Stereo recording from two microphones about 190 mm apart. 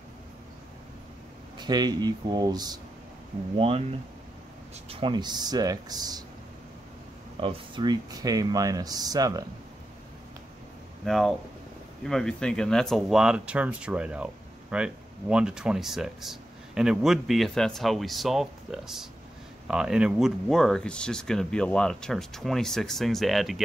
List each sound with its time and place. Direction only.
1.6 s speech: 20° right (ahead or behind)
4.8 s speech: 25° right (ahead or behind)
7.3 s speech: 25° right (ahead or behind)
11.1 s speech: centre (ahead or behind)